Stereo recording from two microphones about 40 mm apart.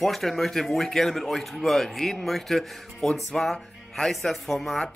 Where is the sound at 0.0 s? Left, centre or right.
Centre.